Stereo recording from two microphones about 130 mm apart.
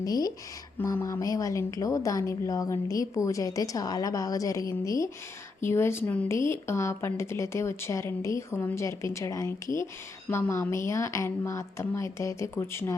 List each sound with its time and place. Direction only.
0.0 s a woman's voice: 30° left (ahead or behind)